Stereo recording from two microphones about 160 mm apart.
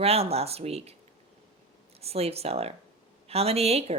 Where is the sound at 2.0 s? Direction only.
40° right (ahead or behind).